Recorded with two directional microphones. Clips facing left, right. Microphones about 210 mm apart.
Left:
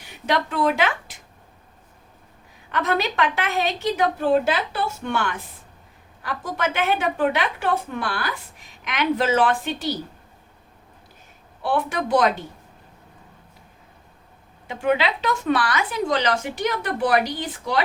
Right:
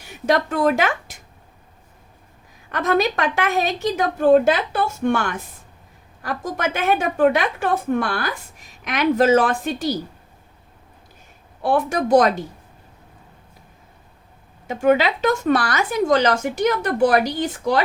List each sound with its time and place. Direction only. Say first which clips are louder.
0.3 s a woman's voice: right 4 dB; 45° right (ahead or behind)
2.7 s a woman's voice: right 3 dB; 45° right (ahead or behind)
11.6 s a woman's voice: right 4 dB; 45° right (ahead or behind)
14.7 s a woman's voice: right 5 dB; 45° right (ahead or behind)